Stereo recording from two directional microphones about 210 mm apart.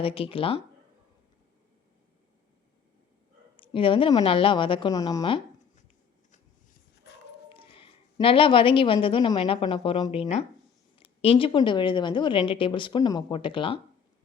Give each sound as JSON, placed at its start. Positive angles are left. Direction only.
{"t": 0.0, "sound": "speech", "side_deg": 25}
{"t": 3.6, "sound": "speech", "side_deg": 25}
{"t": 7.5, "sound": "a woman's voice", "side_deg": 25}